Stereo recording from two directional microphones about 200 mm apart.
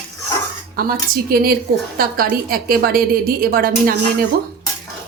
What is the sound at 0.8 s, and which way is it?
A woman's voice, 45° right (ahead or behind).